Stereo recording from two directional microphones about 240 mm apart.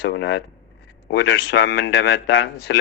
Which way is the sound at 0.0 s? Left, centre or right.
Left.